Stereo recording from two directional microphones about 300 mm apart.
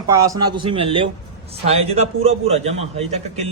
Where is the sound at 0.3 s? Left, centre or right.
Centre.